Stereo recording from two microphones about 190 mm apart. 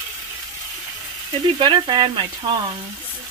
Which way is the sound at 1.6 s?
25° right (ahead or behind).